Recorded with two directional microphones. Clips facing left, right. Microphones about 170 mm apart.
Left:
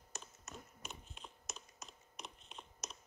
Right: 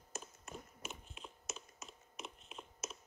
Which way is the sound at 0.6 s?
Centre (ahead or behind).